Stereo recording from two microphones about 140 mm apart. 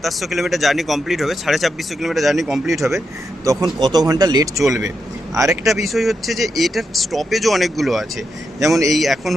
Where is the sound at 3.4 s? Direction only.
25° right (ahead or behind).